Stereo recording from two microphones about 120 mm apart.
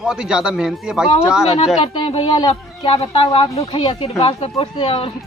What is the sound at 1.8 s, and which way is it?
Speech, 55° left (ahead or behind).